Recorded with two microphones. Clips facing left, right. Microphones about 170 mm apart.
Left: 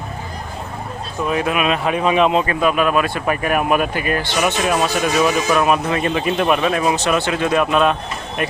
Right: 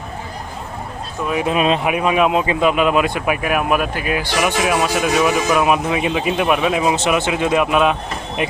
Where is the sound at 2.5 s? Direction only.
20° right (ahead or behind).